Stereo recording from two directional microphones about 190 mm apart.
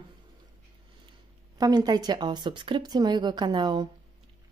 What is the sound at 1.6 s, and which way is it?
Speech, 20° right (ahead or behind).